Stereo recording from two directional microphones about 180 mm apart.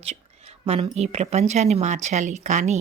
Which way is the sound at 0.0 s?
35° right (ahead or behind).